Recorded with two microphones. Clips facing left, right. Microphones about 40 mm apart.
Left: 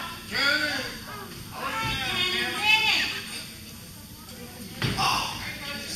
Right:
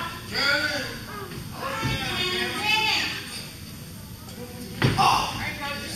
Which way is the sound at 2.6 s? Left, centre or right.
Left.